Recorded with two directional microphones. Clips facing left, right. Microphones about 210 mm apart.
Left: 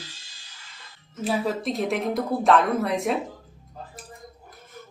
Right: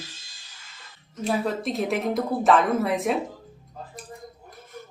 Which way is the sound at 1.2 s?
Centre (ahead or behind).